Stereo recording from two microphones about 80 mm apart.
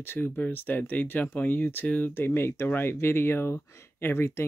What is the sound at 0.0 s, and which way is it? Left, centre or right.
Speech, left.